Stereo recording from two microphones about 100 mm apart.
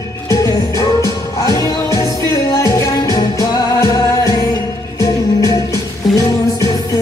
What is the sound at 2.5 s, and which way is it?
Music, 30° left (ahead or behind).